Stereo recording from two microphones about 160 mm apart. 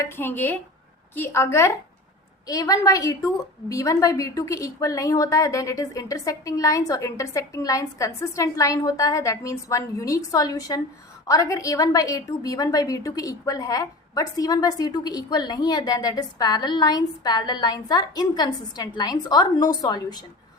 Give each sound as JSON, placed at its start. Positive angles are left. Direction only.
{"t": 0.0, "sound": "a woman's voice", "side_deg": 15}